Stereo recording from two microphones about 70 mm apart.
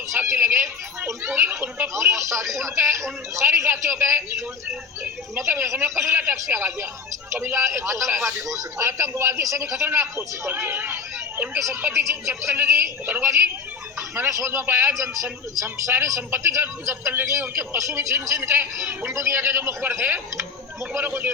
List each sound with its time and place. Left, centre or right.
0.1 s a man's voice: right
1.9 s a man's voice: right
8.4 s a man's voice: right
14.2 s a man's voice: right
16.9 s a man's voice: right
18.5 s a man's voice: right